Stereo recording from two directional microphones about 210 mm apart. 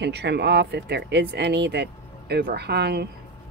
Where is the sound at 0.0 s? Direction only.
55° right (ahead or behind).